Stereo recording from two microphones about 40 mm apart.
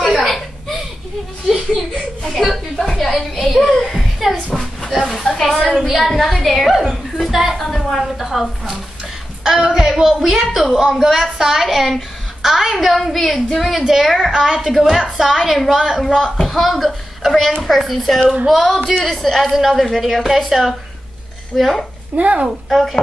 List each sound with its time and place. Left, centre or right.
0.0 s chuckle: centre
2.3 s a sound: centre
3.1 s a woman's voice: centre
3.9 s a sound: centre
5.9 s a woman's voice: centre
7.5 s a sound: centre
9.4 s a woman's voice: centre
14.7 s a woman's voice: centre
15.7 s a woman's voice: centre
16.3 s a child's voice: centre
22.1 s speech: right
22.7 s a woman's voice: centre